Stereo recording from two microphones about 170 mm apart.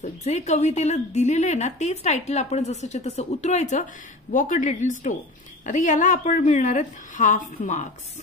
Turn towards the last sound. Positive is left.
turn(degrees=45)  # may be behind; listen again after turning